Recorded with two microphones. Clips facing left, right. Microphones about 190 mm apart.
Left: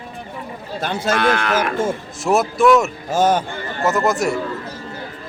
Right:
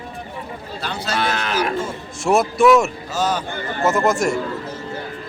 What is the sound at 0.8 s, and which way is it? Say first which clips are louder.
Speech: left 5 dB; 50° left (ahead or behind).